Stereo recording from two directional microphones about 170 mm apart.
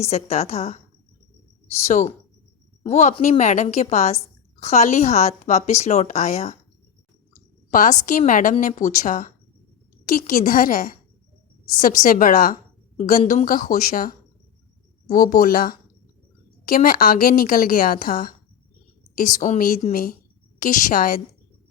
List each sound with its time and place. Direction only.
0.0 s a woman's voice: 40° left (ahead or behind)
1.8 s a woman's voice: 40° left (ahead or behind)
7.7 s a woman's voice: 50° left (ahead or behind)
19.4 s a woman's voice: 50° left (ahead or behind)